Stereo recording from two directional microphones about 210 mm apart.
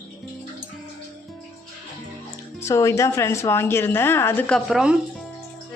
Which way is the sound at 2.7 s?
15° left (ahead or behind).